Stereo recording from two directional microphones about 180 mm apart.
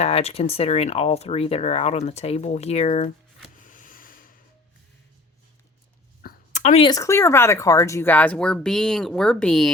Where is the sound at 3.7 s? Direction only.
50° left (ahead or behind).